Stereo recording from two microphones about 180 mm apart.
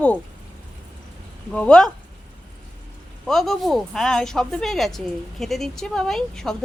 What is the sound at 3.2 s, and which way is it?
Speech, centre (ahead or behind).